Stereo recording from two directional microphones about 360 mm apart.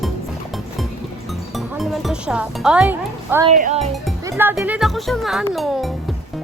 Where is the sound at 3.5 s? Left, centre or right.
Centre.